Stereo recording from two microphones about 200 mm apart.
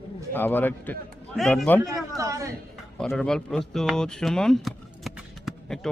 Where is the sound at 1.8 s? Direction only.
15° right (ahead or behind).